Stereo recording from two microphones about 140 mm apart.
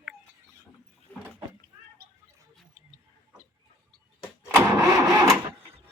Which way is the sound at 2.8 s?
55° right (ahead or behind).